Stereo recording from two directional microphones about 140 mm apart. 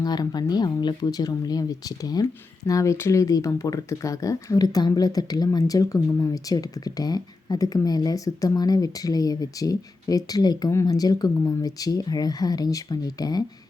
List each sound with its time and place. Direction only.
0.0 s speech: 30° left (ahead or behind)